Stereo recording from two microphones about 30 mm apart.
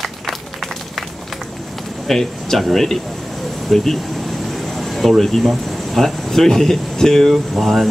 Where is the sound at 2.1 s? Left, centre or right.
Centre.